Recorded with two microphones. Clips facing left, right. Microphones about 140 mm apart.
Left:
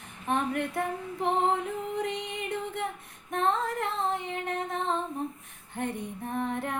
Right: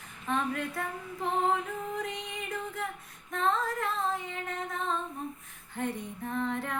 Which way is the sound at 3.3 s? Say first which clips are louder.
Left 2 dB; 25° left (ahead or behind).